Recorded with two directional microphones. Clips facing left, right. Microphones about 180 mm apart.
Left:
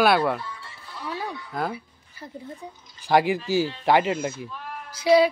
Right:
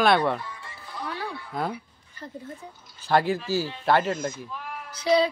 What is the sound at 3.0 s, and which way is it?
Speech, 15° left (ahead or behind).